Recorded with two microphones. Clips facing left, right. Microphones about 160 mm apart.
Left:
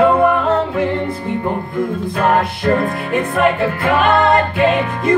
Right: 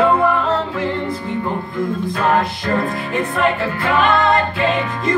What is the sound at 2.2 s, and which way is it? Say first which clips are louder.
Music: left 3 dB; 55° left (ahead or behind).